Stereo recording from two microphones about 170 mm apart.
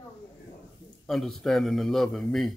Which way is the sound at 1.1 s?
Centre (ahead or behind).